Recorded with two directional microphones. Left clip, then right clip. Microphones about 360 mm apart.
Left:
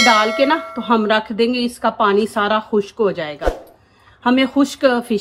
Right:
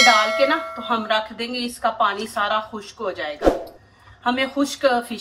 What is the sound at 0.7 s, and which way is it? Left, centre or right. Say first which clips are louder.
A woman's voice: left 5 dB; left.